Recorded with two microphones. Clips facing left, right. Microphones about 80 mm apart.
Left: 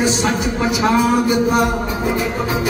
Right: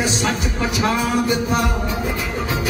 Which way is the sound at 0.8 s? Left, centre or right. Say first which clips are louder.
Left 4 dB; centre.